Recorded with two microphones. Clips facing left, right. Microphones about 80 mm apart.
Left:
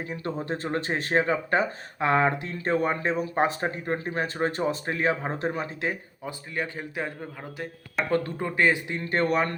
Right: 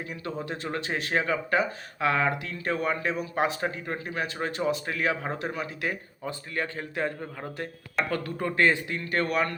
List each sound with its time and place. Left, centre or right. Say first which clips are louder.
0.1 s speech: left 4 dB; left
5.9 s speech: even; centre
8.1 s speech: left 4 dB; left
8.4 s speech: right 2 dB; centre
9.0 s speech: left 3 dB; left